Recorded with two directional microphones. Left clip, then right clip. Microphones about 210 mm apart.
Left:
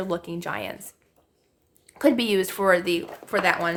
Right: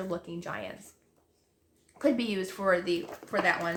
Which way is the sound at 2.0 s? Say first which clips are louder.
Left 8 dB; 50° left (ahead or behind).